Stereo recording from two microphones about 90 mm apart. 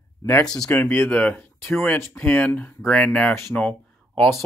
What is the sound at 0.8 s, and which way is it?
Speech, 20° left (ahead or behind).